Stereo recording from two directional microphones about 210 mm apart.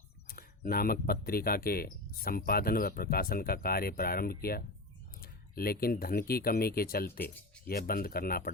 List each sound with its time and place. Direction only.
0.3 s speech: 45° left (ahead or behind)